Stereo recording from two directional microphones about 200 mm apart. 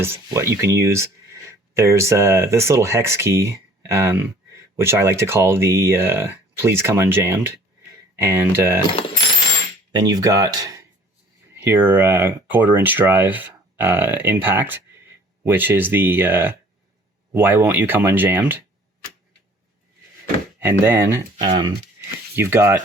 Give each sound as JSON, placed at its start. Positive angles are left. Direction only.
{"t": 0.0, "sound": "speech", "side_deg": -10}
{"t": 9.9, "sound": "speech", "side_deg": -20}
{"t": 20.6, "sound": "speech", "side_deg": -10}